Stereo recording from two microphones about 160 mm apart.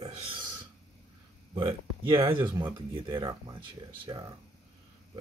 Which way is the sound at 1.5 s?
35° right (ahead or behind).